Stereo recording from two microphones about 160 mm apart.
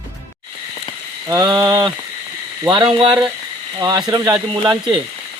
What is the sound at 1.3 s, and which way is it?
Speech, 25° right (ahead or behind).